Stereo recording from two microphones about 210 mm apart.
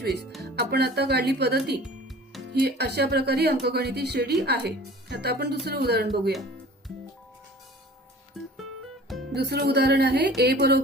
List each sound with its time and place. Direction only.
0.6 s speech: 50° right (ahead or behind)
9.3 s speech: 50° right (ahead or behind)